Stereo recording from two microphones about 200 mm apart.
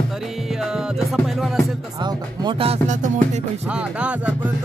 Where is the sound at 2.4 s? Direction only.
30° right (ahead or behind).